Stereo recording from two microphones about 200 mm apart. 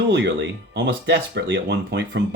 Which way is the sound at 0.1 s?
60° right (ahead or behind).